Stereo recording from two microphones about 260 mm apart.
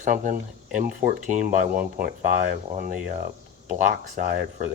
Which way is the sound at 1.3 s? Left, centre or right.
Right.